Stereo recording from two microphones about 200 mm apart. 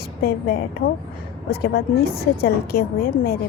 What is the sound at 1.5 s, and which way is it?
Speech, 50° left (ahead or behind).